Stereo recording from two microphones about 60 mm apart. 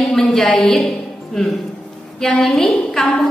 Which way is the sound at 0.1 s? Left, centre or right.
Centre.